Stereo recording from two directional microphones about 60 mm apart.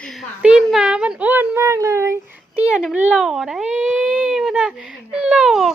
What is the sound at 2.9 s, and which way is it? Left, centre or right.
Speech, right.